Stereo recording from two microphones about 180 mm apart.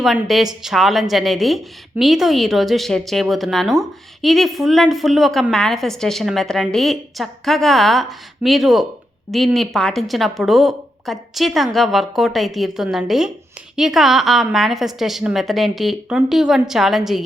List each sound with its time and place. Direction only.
0.0 s a woman's voice: centre (ahead or behind)